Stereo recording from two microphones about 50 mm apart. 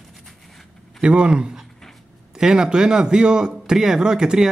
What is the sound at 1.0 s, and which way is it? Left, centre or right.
Speech, centre.